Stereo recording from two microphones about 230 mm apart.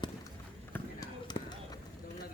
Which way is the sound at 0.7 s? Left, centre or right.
Centre.